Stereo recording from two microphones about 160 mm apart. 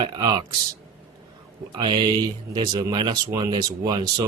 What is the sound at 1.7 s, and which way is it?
Speech, 25° right (ahead or behind).